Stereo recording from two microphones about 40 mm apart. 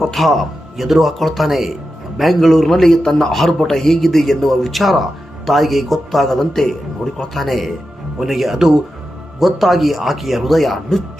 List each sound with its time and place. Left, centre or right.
0.0 s a man's voice: centre